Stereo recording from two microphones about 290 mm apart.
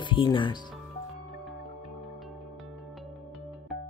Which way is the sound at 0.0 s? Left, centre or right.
Centre.